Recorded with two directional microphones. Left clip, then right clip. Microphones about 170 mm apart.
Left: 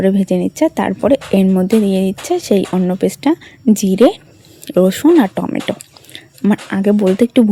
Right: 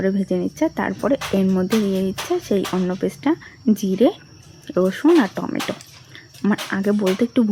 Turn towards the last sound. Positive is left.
turn(degrees=35)  # may be behind; listen again after turning